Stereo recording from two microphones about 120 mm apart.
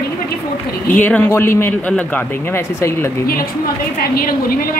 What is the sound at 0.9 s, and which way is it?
A woman's voice, 10° left (ahead or behind).